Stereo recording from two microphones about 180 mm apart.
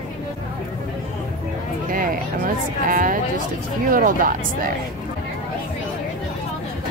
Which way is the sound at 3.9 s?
50° right (ahead or behind).